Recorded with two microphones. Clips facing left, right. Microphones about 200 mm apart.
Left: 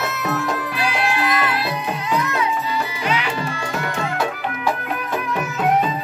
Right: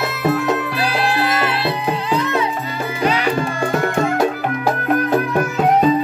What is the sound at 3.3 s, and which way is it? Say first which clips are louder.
Music: right 6 dB; 50° right (ahead or behind).